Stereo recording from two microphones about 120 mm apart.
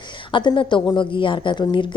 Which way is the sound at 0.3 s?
40° left (ahead or behind).